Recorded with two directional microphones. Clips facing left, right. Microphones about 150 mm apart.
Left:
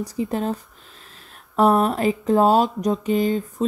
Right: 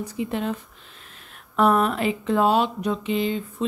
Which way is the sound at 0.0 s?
35° left (ahead or behind).